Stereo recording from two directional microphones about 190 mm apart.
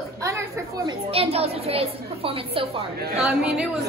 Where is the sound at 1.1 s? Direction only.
30° right (ahead or behind).